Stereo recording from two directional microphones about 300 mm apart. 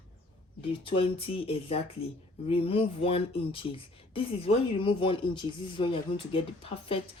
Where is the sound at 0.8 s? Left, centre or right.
Centre.